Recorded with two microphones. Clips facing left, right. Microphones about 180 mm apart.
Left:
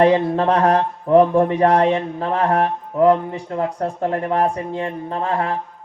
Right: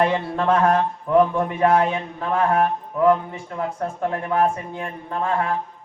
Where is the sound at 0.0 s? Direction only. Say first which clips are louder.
Left 6 dB; 40° left (ahead or behind).